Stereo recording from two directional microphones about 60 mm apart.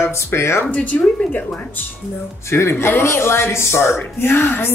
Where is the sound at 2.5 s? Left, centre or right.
Left.